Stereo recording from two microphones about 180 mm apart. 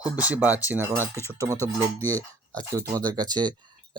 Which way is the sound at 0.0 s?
10° right (ahead or behind).